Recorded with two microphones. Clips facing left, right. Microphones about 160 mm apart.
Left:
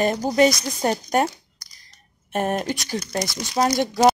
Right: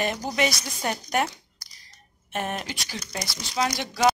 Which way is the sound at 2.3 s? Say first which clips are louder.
Left 7 dB; 45° left (ahead or behind).